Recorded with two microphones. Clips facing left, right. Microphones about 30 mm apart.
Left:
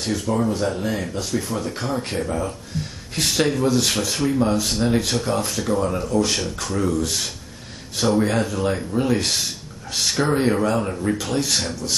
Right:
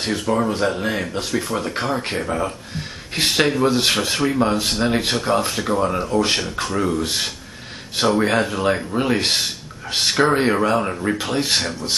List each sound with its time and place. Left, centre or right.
0.0 s speech: right